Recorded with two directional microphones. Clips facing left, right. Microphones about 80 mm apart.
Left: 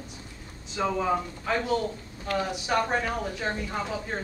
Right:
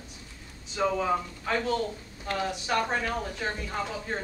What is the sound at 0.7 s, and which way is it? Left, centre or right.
A man's voice, centre.